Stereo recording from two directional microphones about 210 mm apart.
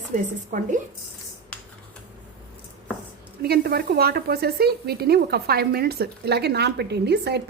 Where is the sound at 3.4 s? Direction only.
50° right (ahead or behind).